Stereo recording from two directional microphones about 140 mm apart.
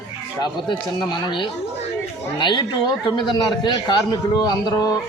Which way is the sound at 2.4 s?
35° left (ahead or behind).